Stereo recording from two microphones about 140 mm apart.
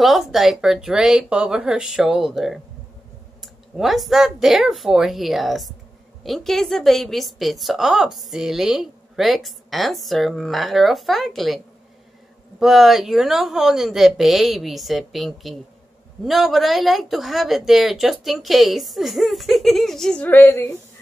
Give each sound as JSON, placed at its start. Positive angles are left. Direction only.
{"t": 0.0, "sound": "a woman's voice", "side_deg": 0}